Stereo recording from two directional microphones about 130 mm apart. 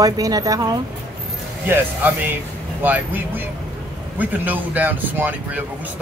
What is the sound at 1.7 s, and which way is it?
Speech, 15° right (ahead or behind).